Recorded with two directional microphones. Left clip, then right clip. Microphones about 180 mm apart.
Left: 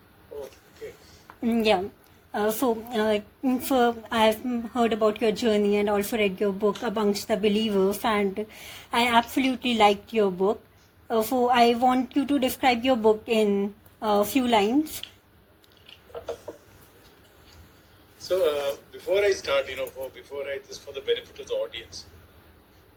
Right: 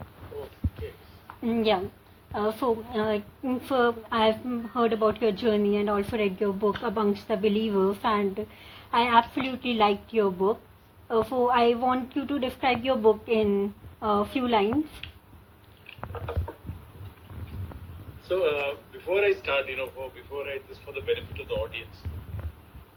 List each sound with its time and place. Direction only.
1.4 s a woman's voice: 60° left (ahead or behind)
2.3 s a woman's voice: 75° left (ahead or behind)
15.0 s a sound: 50° left (ahead or behind)
18.3 s speech: 45° left (ahead or behind)